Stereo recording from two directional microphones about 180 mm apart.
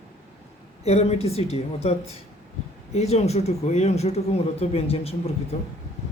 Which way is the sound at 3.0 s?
35° left (ahead or behind).